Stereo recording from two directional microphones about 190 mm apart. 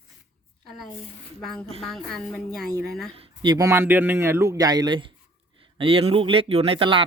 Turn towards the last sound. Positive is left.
turn(degrees=-25)  # may be behind; listen again after turning